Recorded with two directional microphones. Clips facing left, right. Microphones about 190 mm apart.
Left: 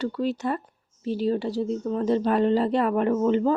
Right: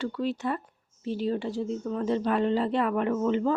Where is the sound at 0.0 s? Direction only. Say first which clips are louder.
Left 3 dB; 40° left (ahead or behind).